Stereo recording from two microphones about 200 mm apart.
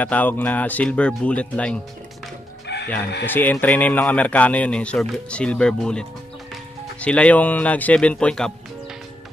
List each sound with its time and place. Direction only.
0.0 s speech: 10° left (ahead or behind)
2.7 s chicken: 60° left (ahead or behind)
3.3 s speech: 10° left (ahead or behind)